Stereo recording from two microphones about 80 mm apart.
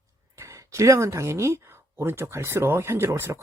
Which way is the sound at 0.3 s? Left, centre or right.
Right.